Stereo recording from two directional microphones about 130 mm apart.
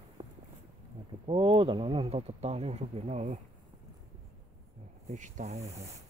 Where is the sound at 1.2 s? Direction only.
45° right (ahead or behind).